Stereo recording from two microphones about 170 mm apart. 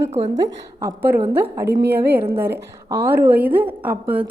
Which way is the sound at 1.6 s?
80° right.